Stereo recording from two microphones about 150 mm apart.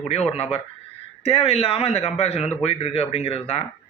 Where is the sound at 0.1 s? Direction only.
45° left (ahead or behind).